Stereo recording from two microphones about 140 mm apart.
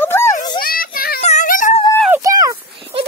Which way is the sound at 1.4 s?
70° left (ahead or behind).